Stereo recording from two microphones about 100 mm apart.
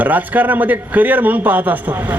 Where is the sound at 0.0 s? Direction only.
15° right (ahead or behind).